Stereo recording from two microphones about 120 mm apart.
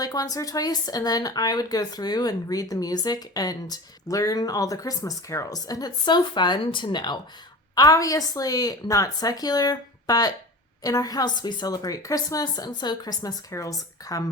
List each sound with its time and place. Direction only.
0.0 s speech: 30° left (ahead or behind)